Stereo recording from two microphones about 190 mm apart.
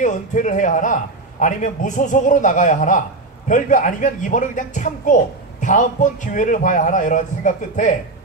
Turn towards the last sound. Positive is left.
turn(degrees=40)  # may be behind; listen again after turning